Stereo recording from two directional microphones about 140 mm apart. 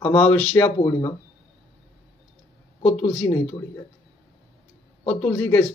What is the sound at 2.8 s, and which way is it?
Speech, 45° left (ahead or behind).